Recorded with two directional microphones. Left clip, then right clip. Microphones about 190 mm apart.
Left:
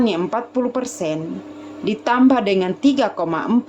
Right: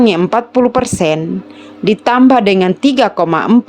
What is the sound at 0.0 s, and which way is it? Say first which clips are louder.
A woman's voice: right 9 dB; 50° right (ahead or behind).